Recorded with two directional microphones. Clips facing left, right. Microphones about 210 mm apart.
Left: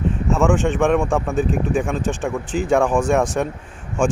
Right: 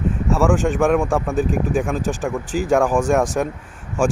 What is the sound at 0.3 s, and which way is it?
Speech, centre (ahead or behind).